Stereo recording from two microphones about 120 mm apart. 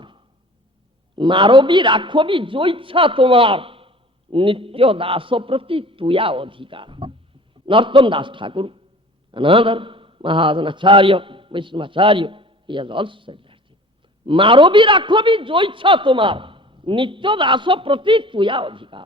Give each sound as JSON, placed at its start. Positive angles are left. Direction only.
{"t": 1.1, "sound": "a man's voice", "side_deg": -45}